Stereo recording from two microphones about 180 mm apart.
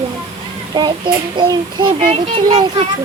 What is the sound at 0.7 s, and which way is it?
A child's voice, 25° right (ahead or behind).